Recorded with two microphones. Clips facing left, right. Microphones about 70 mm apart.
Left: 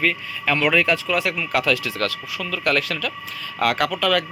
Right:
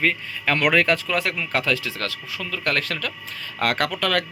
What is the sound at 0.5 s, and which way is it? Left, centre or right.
Speech, right.